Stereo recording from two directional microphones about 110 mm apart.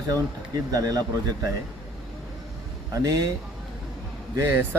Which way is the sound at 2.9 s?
30° right (ahead or behind).